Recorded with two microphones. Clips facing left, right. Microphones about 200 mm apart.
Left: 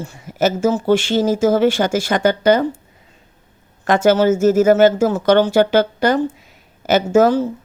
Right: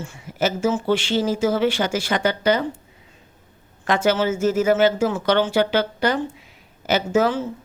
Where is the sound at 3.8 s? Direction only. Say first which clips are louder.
Left 6 dB; 45° left (ahead or behind).